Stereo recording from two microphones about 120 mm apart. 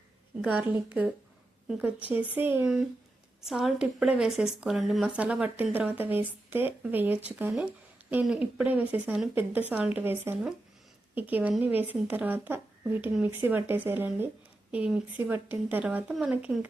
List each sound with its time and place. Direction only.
0.4 s a woman's voice: 10° right (ahead or behind)
3.4 s a woman's voice: 5° right (ahead or behind)